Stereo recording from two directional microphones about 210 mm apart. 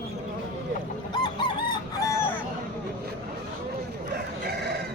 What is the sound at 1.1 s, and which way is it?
Chicken, 20° left (ahead or behind).